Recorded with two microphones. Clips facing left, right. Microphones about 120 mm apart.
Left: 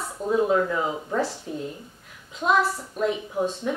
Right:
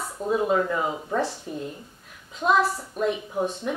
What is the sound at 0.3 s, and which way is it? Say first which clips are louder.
A woman's voice: left 1 dB; 5° right (ahead or behind).